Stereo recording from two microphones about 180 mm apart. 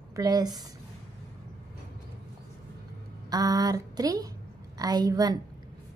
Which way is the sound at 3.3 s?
20° right (ahead or behind).